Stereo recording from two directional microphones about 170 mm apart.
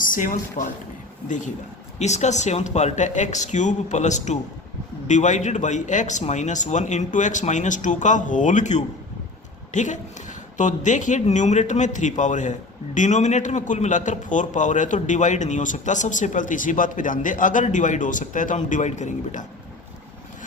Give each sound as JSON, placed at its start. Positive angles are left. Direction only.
{"t": 0.0, "sound": "a woman's voice", "side_deg": 50}